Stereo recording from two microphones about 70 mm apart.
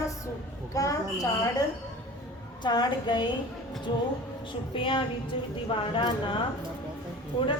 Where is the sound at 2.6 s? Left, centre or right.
Left.